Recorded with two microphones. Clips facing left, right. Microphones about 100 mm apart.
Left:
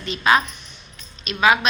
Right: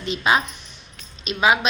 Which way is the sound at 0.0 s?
20° right (ahead or behind).